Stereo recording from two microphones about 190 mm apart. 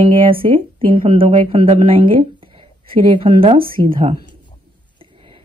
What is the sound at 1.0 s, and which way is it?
Speech, 30° right (ahead or behind).